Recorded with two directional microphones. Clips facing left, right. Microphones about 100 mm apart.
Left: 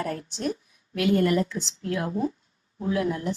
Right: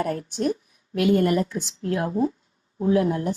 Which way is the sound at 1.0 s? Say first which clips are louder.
Right 2 dB; 30° right (ahead or behind).